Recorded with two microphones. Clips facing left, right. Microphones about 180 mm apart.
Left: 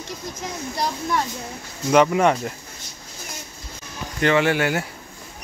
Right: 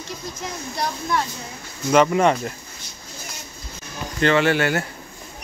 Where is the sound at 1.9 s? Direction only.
10° left (ahead or behind).